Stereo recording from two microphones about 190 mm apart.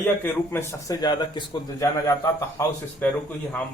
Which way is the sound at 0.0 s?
10° left (ahead or behind).